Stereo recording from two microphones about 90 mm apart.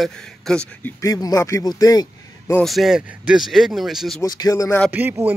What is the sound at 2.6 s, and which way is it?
Speech, centre (ahead or behind).